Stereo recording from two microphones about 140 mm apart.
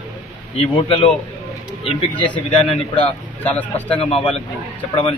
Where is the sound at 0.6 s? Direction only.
40° left (ahead or behind).